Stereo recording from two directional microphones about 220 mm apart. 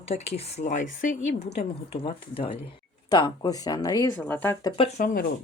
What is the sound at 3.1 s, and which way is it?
Speech, 20° left (ahead or behind).